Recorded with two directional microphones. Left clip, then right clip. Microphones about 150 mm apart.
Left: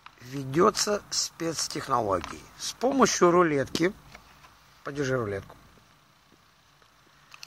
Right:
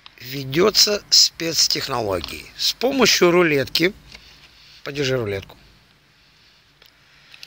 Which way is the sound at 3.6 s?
35° right (ahead or behind).